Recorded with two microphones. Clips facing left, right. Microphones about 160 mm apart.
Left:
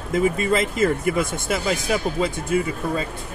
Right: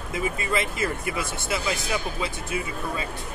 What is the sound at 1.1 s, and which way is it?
Speech, 45° left (ahead or behind).